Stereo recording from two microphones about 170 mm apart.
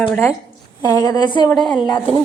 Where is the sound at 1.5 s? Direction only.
Centre (ahead or behind).